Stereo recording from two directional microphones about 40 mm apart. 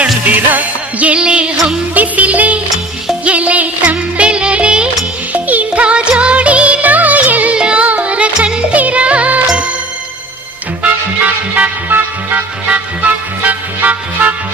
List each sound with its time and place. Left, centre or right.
0.0 s music: right
1.2 s music: right
2.0 s music: right
5.3 s music: right
7.5 s music: right
8.7 s music: right
10.8 s music: right
11.9 s music: right
12.6 s music: right